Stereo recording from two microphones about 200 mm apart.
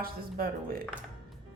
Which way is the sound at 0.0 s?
45° right (ahead or behind).